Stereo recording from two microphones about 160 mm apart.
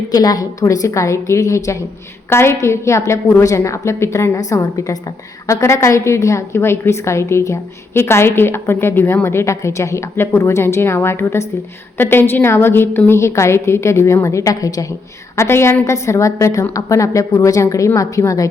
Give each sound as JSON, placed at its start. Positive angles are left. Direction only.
{"t": 0.1, "sound": "a woman's voice", "side_deg": 25}